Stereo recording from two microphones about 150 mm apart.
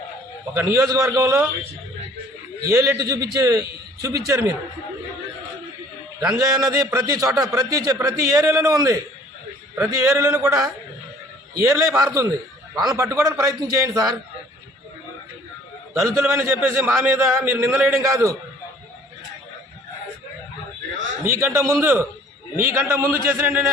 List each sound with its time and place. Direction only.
0.5 s a man's voice: 15° right (ahead or behind)
2.6 s a man's voice: 20° right (ahead or behind)
6.4 s a man's voice: 25° right (ahead or behind)
16.0 s a man's voice: 20° right (ahead or behind)
21.2 s a man's voice: 20° right (ahead or behind)